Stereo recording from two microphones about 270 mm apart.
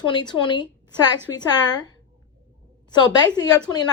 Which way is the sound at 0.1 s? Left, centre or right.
Centre.